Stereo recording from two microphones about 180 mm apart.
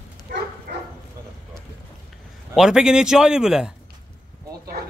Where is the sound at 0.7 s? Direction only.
50° right (ahead or behind).